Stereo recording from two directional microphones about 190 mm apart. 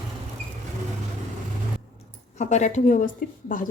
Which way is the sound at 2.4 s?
40° left (ahead or behind).